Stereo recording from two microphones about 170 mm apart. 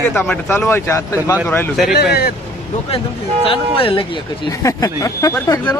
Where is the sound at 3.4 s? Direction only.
30° left (ahead or behind).